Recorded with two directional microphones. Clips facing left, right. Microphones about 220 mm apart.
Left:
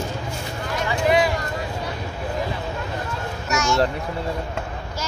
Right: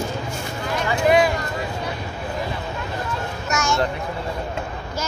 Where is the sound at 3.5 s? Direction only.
50° right (ahead or behind).